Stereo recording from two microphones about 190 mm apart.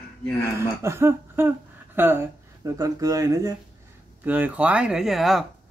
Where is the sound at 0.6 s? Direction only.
15° right (ahead or behind).